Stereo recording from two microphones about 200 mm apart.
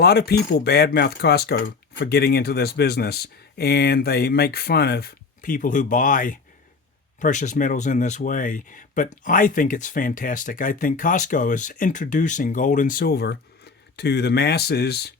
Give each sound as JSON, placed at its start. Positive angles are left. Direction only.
{"t": 0.0, "sound": "speech", "side_deg": 55}